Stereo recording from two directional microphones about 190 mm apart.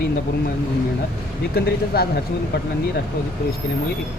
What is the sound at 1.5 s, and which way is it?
Speech, 55° left (ahead or behind).